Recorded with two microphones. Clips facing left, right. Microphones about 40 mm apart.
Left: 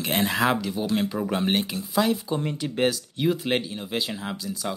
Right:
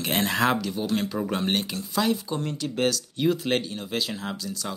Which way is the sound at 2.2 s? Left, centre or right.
Centre.